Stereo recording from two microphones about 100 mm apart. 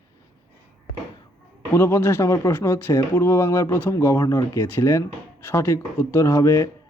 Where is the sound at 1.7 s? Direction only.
25° left (ahead or behind).